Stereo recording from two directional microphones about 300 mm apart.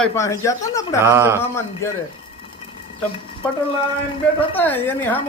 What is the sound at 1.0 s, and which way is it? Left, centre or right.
Speech, centre.